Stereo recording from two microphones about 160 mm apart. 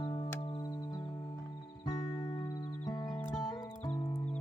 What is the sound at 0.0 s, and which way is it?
Music, 30° left (ahead or behind).